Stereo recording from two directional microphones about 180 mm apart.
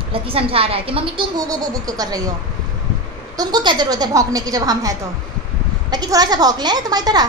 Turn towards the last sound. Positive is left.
turn(degrees=-20)  # may be behind; listen again after turning